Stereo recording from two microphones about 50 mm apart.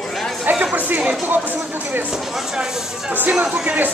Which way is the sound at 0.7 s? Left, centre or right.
Right.